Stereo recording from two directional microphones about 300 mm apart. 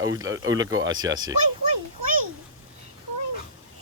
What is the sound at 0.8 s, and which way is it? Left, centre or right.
Speech, right.